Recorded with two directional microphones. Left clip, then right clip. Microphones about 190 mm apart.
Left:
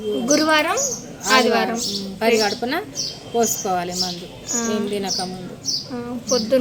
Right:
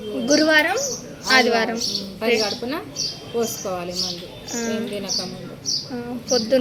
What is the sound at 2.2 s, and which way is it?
Speech, 55° left (ahead or behind).